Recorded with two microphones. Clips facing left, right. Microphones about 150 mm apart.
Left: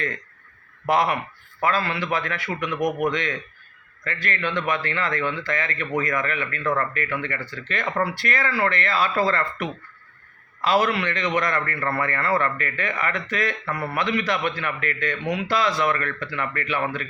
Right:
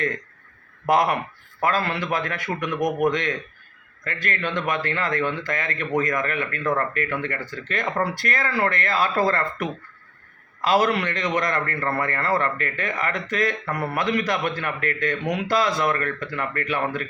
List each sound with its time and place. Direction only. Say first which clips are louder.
0.9 s a man's voice: right 1 dB; 45° right (ahead or behind)